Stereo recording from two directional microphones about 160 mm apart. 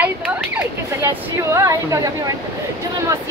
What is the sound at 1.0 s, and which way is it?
Speech, 20° right (ahead or behind).